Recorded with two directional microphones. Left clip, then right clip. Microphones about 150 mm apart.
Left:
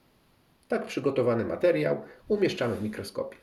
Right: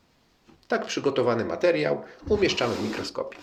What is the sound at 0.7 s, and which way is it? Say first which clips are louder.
Speech: right 3 dB; 20° left (ahead or behind).